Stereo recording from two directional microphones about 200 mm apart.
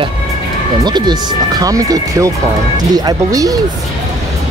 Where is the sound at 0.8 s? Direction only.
20° right (ahead or behind).